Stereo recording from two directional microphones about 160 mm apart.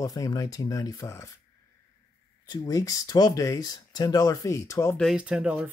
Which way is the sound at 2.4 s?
25° left (ahead or behind).